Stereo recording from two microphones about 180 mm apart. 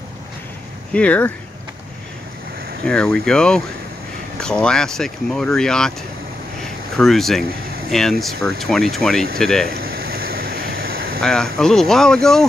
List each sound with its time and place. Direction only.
0.9 s speech: 10° left (ahead or behind)
2.8 s speech: 5° left (ahead or behind)
7.0 s speech: centre (ahead or behind)
9.7 s a sound: 55° right (ahead or behind)
11.1 s speech: centre (ahead or behind)